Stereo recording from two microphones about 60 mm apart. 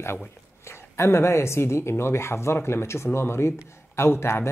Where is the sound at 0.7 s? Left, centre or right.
Left.